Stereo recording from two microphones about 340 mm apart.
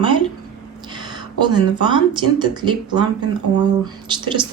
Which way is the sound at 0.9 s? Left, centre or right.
Centre.